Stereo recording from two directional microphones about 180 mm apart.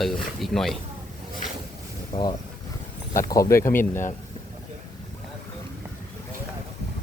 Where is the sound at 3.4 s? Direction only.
15° left (ahead or behind).